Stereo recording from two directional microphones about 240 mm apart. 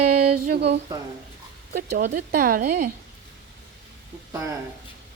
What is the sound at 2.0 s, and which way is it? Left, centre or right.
Speech, right.